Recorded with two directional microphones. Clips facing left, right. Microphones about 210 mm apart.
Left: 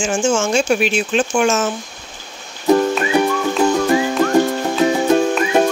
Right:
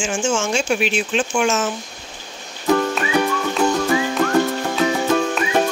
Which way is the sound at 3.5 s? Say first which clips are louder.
Left 3 dB; centre (ahead or behind).